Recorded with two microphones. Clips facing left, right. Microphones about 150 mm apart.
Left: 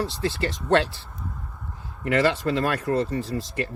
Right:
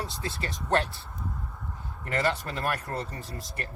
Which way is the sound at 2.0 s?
90° left.